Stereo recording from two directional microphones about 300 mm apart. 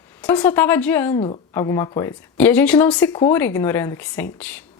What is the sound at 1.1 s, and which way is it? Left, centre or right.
A woman's voice, centre.